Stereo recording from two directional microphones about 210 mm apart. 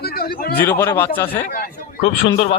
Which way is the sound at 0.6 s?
10° left (ahead or behind).